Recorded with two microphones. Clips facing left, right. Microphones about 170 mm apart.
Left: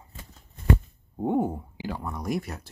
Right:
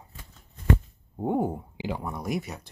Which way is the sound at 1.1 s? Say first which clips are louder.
Left 1 dB; 10° right (ahead or behind).